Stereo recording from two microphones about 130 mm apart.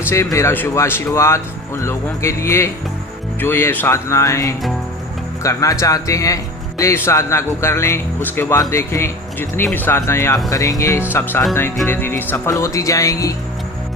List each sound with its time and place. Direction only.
0.1 s speech: 20° left (ahead or behind)